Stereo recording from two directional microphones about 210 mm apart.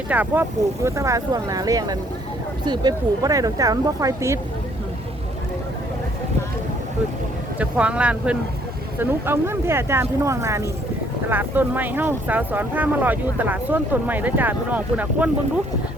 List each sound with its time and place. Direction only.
0.1 s speech: 10° right (ahead or behind)
7.6 s speech: 5° right (ahead or behind)